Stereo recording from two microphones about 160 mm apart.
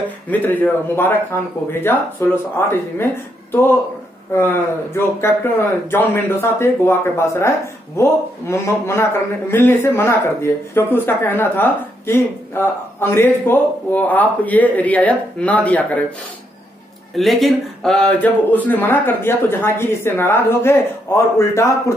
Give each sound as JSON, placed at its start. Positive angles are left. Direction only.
{"t": 0.3, "sound": "speech", "side_deg": 10}
{"t": 4.9, "sound": "speech", "side_deg": 15}
{"t": 17.1, "sound": "speech", "side_deg": 0}